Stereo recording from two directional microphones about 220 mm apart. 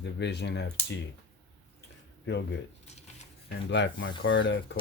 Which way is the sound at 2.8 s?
30° left (ahead or behind).